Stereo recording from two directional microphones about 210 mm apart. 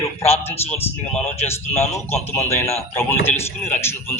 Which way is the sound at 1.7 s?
30° left (ahead or behind).